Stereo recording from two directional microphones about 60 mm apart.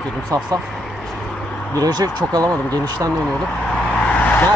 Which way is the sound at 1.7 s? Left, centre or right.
Right.